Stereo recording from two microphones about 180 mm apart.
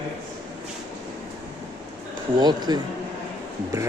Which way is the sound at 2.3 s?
25° right (ahead or behind).